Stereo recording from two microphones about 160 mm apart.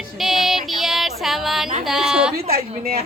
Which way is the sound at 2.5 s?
70° right (ahead or behind).